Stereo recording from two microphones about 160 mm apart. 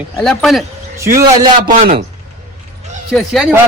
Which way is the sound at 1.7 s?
55° right (ahead or behind).